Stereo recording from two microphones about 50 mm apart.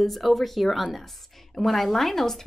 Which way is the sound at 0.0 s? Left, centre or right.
Centre.